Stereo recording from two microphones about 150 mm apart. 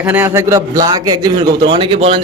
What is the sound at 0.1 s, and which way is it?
A man's voice, 15° right (ahead or behind).